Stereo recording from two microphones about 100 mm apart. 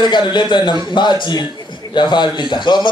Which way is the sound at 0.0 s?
50° left (ahead or behind).